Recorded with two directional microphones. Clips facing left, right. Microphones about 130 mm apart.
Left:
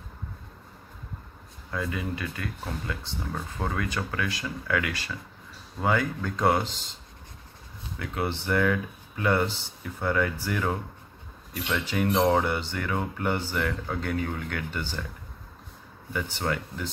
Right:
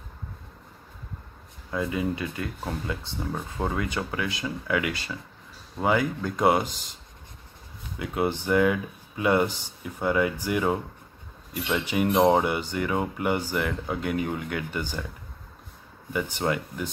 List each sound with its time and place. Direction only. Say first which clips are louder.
1.7 s speech: right 4 dB; 20° right (ahead or behind)
8.0 s speech: right 4 dB; 15° right (ahead or behind)
16.1 s speech: right 3 dB; 15° right (ahead or behind)